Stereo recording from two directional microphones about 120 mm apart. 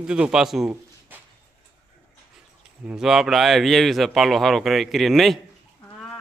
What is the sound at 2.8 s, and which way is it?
Speech, 5° right (ahead or behind).